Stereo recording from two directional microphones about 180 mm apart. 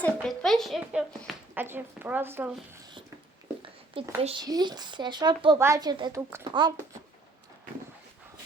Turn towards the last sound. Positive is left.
turn(degrees=-25)  # may be behind; listen again after turning